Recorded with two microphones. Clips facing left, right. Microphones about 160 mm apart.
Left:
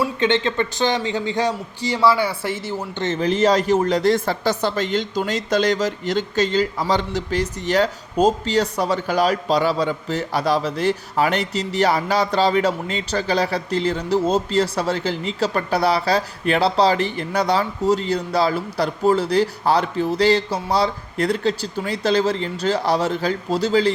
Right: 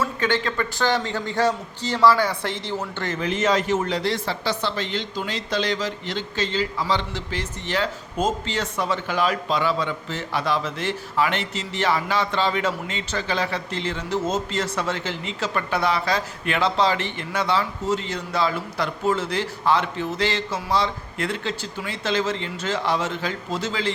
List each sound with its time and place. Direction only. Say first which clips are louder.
0.0 s a man's voice: left 4 dB; 20° left (ahead or behind)
2.9 s speech: left 5 dB; 20° left (ahead or behind)
3.2 s speech: left 5 dB; 35° left (ahead or behind)